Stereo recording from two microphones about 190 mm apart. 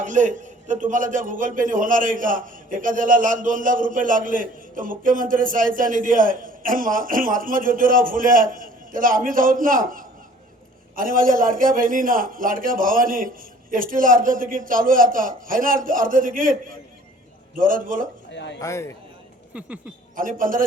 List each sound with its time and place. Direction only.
0.0 s a man's voice: 40° right (ahead or behind)
18.3 s a man's voice: 65° left (ahead or behind)
18.6 s a man's voice: 15° left (ahead or behind)
19.5 s a sound: 5° right (ahead or behind)
20.1 s a man's voice: 45° right (ahead or behind)